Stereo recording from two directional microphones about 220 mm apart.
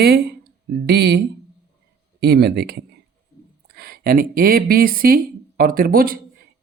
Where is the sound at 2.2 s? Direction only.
45° right (ahead or behind).